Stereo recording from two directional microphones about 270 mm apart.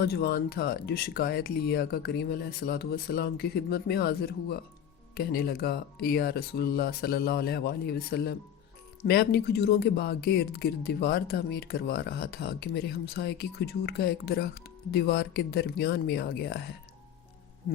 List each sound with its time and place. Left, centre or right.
0.0 s speech: left